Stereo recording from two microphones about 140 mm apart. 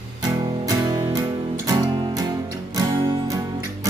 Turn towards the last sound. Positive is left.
turn(degrees=-25)  # may be behind; listen again after turning